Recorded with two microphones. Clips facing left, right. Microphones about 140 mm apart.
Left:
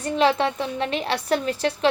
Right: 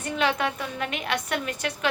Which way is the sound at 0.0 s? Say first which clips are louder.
Left 5 dB; 35° left (ahead or behind).